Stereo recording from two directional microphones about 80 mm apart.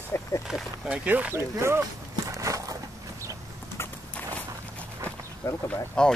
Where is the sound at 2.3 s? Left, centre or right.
Right.